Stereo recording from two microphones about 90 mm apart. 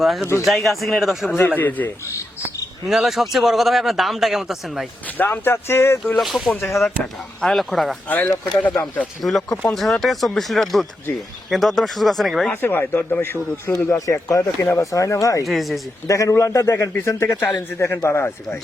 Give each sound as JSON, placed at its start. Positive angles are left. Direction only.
{"t": 0.0, "sound": "a man's voice", "side_deg": 0}
{"t": 1.4, "sound": "speech", "side_deg": 25}
{"t": 2.8, "sound": "a man's voice", "side_deg": -5}
{"t": 5.1, "sound": "speech", "side_deg": 25}
{"t": 6.1, "sound": "a man's voice", "side_deg": 0}
{"t": 6.7, "sound": "a man's voice", "side_deg": 30}
{"t": 7.0, "sound": "a man's voice", "side_deg": 5}
{"t": 8.0, "sound": "speech", "side_deg": 20}
{"t": 9.2, "sound": "a man's voice", "side_deg": 0}
{"t": 12.6, "sound": "speech", "side_deg": 25}
{"t": 14.0, "sound": "a man's voice", "side_deg": 40}
{"t": 15.4, "sound": "a man's voice", "side_deg": 0}
{"t": 16.0, "sound": "a man's voice", "side_deg": 35}